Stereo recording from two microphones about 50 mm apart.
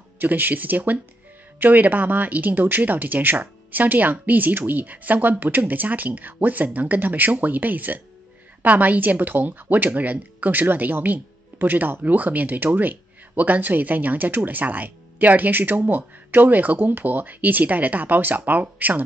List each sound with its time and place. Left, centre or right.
0.2 s speech: right